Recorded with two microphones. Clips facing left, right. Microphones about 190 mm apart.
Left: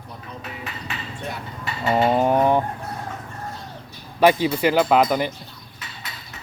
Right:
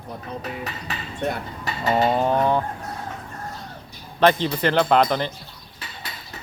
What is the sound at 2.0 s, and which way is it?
Speech, 10° left (ahead or behind).